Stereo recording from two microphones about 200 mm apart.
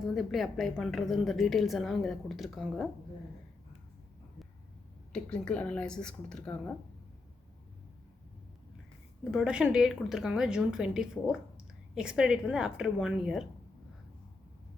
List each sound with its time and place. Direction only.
0.0 s a woman's voice: centre (ahead or behind)
5.1 s a woman's voice: 5° left (ahead or behind)
9.3 s a woman's voice: 5° right (ahead or behind)